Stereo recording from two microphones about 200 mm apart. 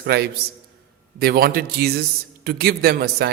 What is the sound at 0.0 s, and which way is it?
A man's voice, 55° right (ahead or behind).